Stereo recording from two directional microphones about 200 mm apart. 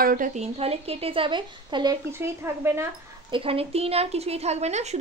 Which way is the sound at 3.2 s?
25° right (ahead or behind).